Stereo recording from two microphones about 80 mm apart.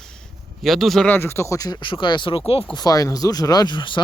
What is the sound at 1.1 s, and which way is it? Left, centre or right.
Speech, left.